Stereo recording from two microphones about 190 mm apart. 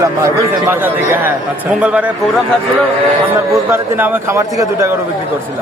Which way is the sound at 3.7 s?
10° right (ahead or behind).